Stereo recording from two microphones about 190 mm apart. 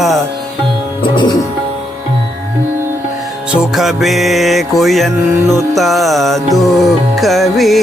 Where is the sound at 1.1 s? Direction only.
25° left (ahead or behind).